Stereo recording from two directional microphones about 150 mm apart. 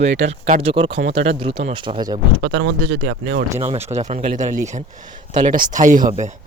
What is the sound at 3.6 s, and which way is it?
Speech, 45° right (ahead or behind).